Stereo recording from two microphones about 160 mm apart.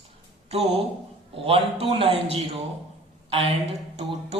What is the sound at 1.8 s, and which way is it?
Speech, 35° right (ahead or behind).